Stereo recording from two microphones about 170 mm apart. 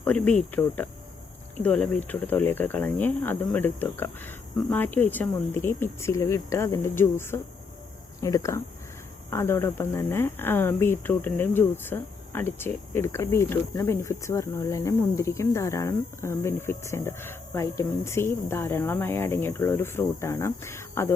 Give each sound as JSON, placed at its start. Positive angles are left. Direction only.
{"t": 0.0, "sound": "speech", "side_deg": 5}